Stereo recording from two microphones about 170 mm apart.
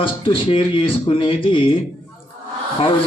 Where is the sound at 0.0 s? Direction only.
30° left (ahead or behind).